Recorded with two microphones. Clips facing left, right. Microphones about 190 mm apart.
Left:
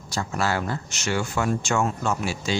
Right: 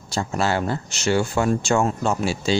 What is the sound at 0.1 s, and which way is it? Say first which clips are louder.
Speech: right 3 dB; 30° right (ahead or behind).